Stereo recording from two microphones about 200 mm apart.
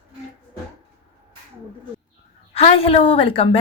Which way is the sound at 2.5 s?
30° left (ahead or behind).